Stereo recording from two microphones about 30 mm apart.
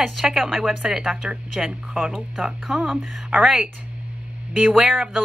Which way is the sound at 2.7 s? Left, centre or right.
Centre.